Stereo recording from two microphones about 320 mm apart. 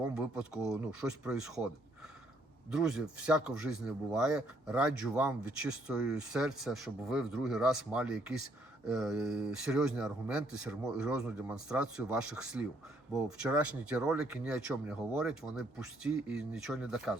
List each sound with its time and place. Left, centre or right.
0.1 s speech: centre